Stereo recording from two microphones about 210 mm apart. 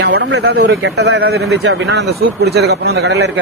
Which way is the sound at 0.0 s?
55° right (ahead or behind).